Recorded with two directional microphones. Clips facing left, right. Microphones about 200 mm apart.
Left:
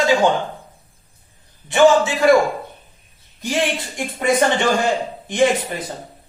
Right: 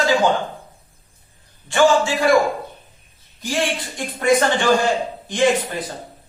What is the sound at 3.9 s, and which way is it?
A woman's voice, 20° left (ahead or behind).